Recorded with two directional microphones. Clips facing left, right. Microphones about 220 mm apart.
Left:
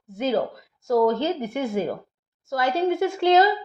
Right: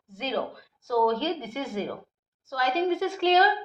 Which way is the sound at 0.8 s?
50° left (ahead or behind).